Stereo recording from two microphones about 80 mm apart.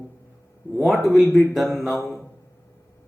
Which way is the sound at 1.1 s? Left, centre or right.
Centre.